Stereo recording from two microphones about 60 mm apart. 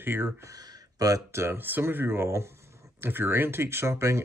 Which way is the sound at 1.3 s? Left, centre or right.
Right.